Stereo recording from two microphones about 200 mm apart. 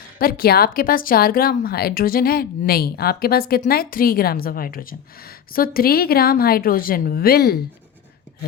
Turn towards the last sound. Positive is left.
turn(degrees=50)  # may be behind; listen again after turning